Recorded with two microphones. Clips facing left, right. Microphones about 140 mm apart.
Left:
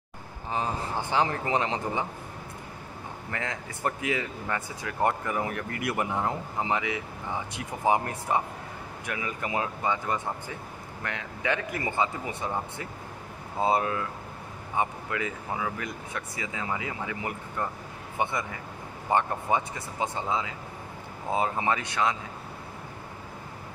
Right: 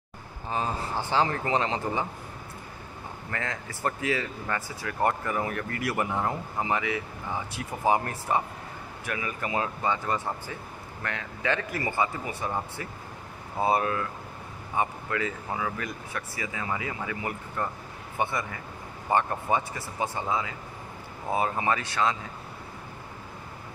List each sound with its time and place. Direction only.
0.5 s speech: 20° left (ahead or behind)
3.3 s speech: 20° left (ahead or behind)